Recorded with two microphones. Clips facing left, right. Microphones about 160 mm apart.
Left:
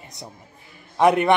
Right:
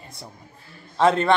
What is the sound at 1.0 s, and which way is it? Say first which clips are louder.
Speech: left 2 dB; 15° left (ahead or behind).